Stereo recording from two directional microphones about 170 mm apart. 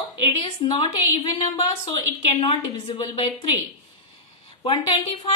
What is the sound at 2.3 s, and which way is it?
A woman's voice, 30° left (ahead or behind).